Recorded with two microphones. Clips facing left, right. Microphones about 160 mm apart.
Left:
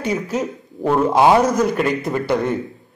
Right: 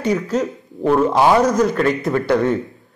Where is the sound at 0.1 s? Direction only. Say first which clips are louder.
Right 3 dB; 20° left (ahead or behind).